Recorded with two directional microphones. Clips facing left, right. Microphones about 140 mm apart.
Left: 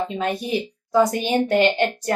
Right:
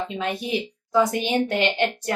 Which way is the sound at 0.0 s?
40° left (ahead or behind).